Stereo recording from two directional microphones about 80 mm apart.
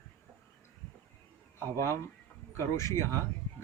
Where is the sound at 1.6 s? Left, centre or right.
Left.